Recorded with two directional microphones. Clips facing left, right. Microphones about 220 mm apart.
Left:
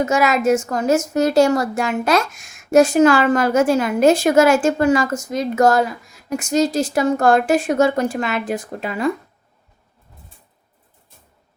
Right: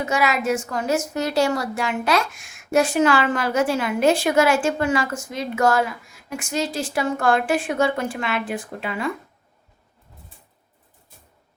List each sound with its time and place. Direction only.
0.0 s a woman's voice: 45° left (ahead or behind)